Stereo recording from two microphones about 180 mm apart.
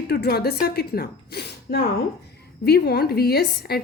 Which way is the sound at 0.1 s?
60° left (ahead or behind).